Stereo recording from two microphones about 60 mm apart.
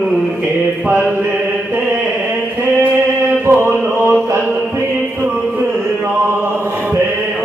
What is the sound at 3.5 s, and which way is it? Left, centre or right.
Mantra, right.